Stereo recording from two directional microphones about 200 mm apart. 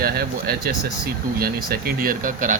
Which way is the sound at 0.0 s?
50° right (ahead or behind).